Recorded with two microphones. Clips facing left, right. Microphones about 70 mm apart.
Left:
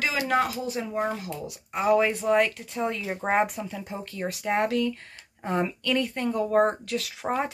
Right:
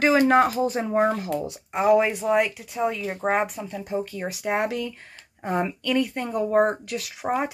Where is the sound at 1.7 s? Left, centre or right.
Centre.